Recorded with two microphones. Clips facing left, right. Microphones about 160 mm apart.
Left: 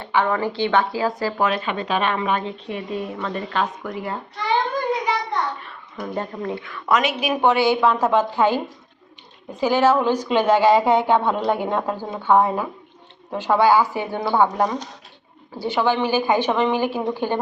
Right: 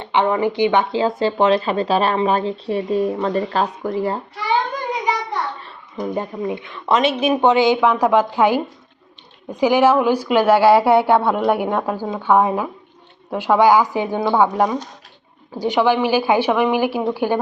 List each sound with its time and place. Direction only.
0.0 s speech: 20° right (ahead or behind)
6.0 s a woman's voice: 15° right (ahead or behind)